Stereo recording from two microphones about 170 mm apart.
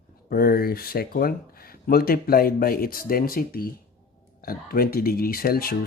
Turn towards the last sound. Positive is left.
turn(degrees=60)  # may be behind; listen again after turning